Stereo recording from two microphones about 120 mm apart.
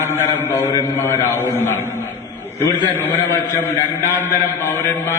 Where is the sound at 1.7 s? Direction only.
20° left (ahead or behind).